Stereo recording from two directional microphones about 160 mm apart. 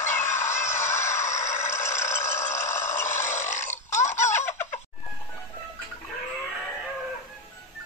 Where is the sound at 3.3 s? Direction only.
50° left (ahead or behind).